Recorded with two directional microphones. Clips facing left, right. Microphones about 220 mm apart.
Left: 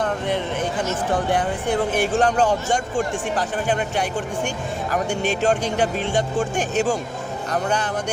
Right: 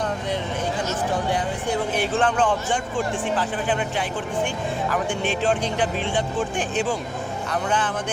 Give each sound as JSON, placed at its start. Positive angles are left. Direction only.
{"t": 2.0, "sound": "speech", "side_deg": 40}